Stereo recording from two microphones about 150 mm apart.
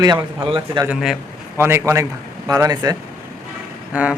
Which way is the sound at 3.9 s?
10° right (ahead or behind).